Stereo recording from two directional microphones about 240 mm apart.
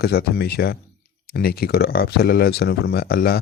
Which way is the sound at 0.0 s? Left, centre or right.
Left.